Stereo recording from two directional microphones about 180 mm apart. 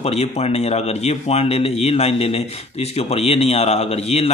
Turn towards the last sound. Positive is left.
turn(degrees=35)  # may be behind; listen again after turning